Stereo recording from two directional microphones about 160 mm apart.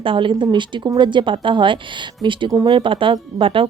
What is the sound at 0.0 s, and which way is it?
A woman's voice, 30° right (ahead or behind).